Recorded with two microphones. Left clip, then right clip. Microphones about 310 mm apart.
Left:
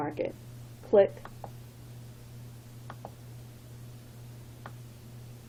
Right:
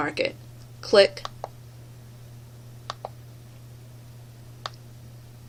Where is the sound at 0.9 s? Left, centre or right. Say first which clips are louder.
Right 5 dB; right.